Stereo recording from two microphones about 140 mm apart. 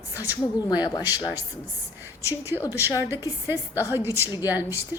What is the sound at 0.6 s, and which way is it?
Speech, 30° left (ahead or behind).